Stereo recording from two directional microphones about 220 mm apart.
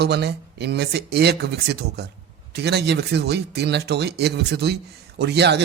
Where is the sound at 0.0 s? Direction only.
50° right (ahead or behind).